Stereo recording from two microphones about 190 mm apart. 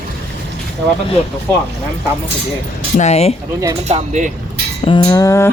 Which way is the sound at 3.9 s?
40° right (ahead or behind).